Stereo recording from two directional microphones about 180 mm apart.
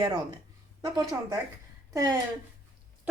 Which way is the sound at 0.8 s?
20° right (ahead or behind).